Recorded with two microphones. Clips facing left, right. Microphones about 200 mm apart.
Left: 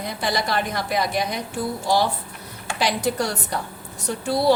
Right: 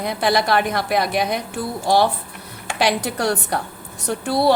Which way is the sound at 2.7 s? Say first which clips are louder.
Right 2 dB; 65° right (ahead or behind).